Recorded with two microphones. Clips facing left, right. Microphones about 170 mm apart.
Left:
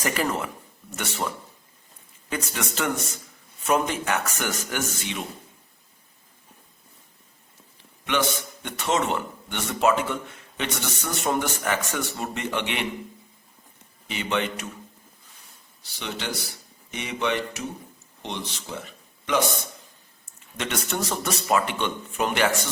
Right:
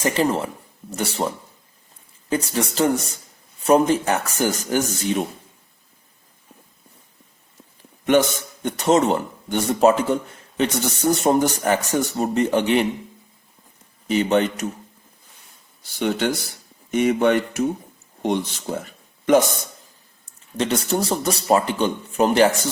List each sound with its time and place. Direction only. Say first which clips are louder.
0.0 s a man's voice: right 6 dB; 30° right (ahead or behind)
2.3 s a man's voice: right 7 dB; 35° right (ahead or behind)
8.0 s a man's voice: right 8 dB; 45° right (ahead or behind)
14.1 s a man's voice: right 9 dB; 40° right (ahead or behind)
15.8 s speech: right 12 dB; 50° right (ahead or behind)
20.6 s a man's voice: right 7 dB; 35° right (ahead or behind)